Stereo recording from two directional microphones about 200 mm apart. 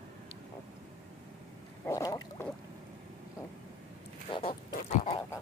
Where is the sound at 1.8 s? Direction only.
20° left (ahead or behind).